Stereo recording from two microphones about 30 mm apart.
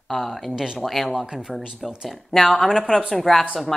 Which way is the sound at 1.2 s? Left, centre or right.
Right.